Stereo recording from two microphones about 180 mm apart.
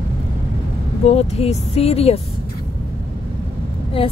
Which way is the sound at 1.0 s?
35° left (ahead or behind).